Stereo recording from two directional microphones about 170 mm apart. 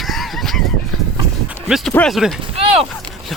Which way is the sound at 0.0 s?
Centre (ahead or behind).